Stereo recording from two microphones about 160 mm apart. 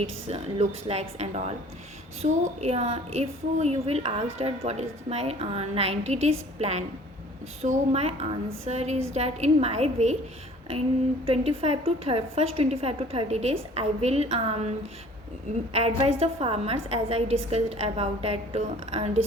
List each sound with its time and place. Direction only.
0.0 s a woman's voice: 40° right (ahead or behind)
11.3 s a woman's voice: 40° right (ahead or behind)
15.7 s a woman's voice: 40° right (ahead or behind)